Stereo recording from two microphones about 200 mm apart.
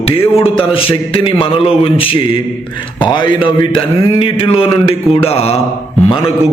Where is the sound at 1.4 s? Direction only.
25° left (ahead or behind).